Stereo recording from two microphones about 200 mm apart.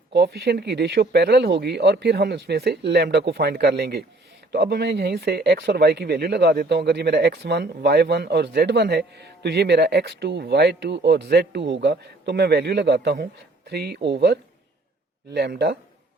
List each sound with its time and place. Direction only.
0.1 s speech: 55° right (ahead or behind)